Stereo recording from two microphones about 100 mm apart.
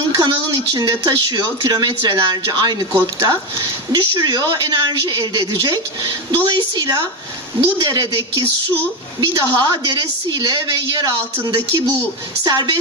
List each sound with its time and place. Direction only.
0.1 s a woman's voice: 40° right (ahead or behind)